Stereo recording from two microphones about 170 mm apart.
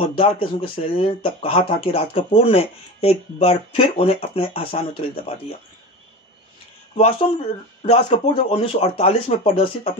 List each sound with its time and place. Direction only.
0.0 s speech: 30° left (ahead or behind)
7.0 s speech: 35° left (ahead or behind)